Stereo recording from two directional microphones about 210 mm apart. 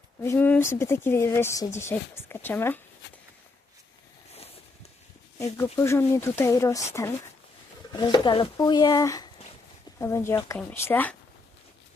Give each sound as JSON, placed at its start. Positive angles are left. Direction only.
{"t": 0.2, "sound": "speech", "side_deg": 10}
{"t": 4.4, "sound": "a sound", "side_deg": 30}
{"t": 5.5, "sound": "speech", "side_deg": 10}